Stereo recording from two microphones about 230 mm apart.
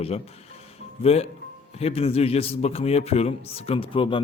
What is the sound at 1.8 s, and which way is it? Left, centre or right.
A man's voice, left.